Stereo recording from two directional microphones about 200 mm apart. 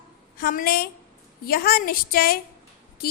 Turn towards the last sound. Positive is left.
turn(degrees=50)  # may be behind; listen again after turning